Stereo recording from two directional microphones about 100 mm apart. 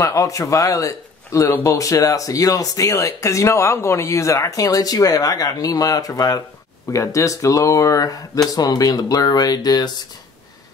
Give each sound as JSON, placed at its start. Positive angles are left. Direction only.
{"t": 0.0, "sound": "speech", "side_deg": 35}